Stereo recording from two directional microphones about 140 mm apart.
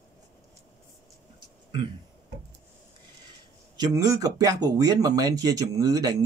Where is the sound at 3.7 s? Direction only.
25° right (ahead or behind).